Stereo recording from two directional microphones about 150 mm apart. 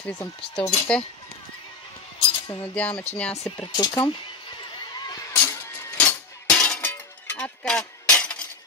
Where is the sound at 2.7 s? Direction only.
10° left (ahead or behind).